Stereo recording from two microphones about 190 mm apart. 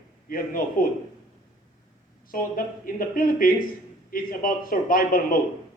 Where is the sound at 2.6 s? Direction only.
50° left (ahead or behind).